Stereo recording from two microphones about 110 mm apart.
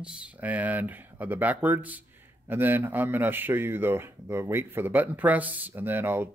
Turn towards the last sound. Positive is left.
turn(degrees=-20)  # may be behind; listen again after turning